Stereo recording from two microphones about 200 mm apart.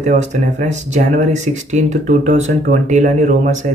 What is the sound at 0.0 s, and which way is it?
Speech, 35° right (ahead or behind).